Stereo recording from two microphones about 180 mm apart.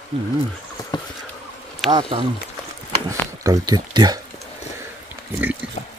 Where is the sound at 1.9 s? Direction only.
25° right (ahead or behind).